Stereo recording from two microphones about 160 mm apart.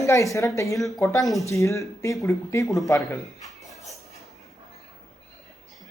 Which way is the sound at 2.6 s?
Centre (ahead or behind).